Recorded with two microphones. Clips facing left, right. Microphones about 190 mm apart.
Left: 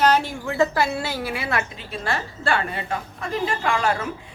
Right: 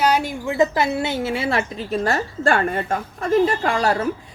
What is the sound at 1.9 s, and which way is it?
A woman's voice, 40° right (ahead or behind).